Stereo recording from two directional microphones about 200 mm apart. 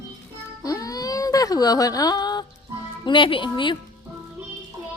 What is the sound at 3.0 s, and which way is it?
Speech, 25° left (ahead or behind).